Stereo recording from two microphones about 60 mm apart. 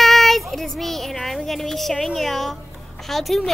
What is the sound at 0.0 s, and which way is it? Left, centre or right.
Child singing, centre.